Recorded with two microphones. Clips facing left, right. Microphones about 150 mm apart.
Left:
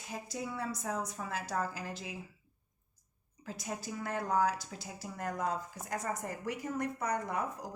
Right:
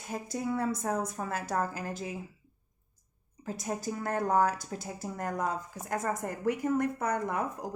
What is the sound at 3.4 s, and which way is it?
Speech, 45° right (ahead or behind).